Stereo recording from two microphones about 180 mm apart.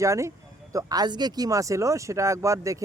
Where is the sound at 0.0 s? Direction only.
15° right (ahead or behind).